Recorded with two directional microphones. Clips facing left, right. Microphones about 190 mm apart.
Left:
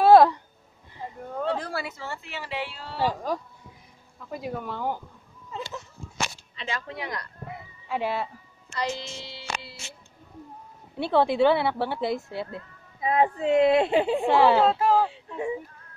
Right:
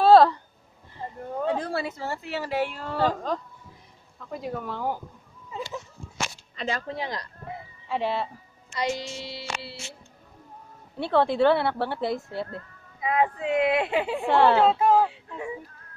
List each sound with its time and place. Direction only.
0.0 s a sound: 15° left (ahead or behind)
1.3 s a sound: 15° right (ahead or behind)
2.0 s speech: 40° right (ahead or behind)
3.0 s speech: 10° left (ahead or behind)
5.5 s a sound: 10° right (ahead or behind)
6.5 s a man's voice: 40° right (ahead or behind)
7.9 s speech: 5° left (ahead or behind)
8.7 s music: 10° right (ahead or behind)
9.4 s speech: 30° right (ahead or behind)
11.0 s speech: 10° left (ahead or behind)
13.0 s speech: 30° left (ahead or behind)
14.2 s speech: 5° left (ahead or behind)
15.0 s speech: 25° left (ahead or behind)